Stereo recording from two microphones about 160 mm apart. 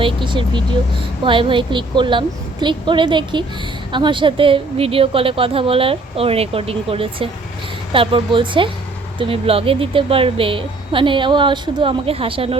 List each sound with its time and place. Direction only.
0.0 s a woman's voice: 30° right (ahead or behind)